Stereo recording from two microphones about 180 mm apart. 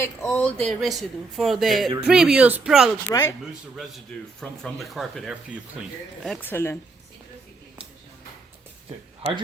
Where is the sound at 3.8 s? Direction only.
Centre (ahead or behind).